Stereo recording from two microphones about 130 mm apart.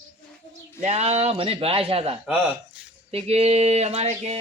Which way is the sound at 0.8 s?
55° right (ahead or behind).